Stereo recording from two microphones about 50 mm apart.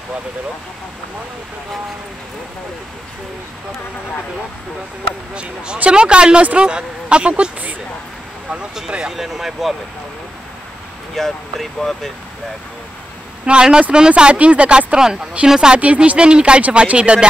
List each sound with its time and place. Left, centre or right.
5.3 s speech: right; by 9.8 s centre
11.1 s speech: centre
13.5 s speech: centre
15.8 s speech: right